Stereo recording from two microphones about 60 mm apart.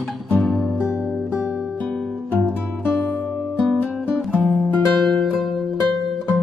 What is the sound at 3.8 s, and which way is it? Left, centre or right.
Music, left.